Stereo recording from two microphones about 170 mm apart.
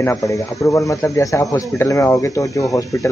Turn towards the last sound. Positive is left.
turn(degrees=20)  # may be behind; listen again after turning